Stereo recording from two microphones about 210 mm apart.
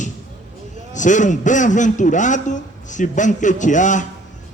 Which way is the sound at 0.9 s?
35° left (ahead or behind).